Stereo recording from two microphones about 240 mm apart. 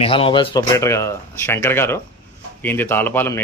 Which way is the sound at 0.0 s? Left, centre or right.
Left.